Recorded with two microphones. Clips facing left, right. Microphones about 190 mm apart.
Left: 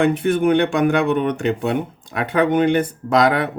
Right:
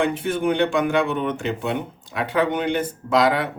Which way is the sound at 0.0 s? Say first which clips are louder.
Left 5 dB; 60° left (ahead or behind).